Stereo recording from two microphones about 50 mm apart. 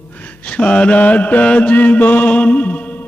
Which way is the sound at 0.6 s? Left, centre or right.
Left.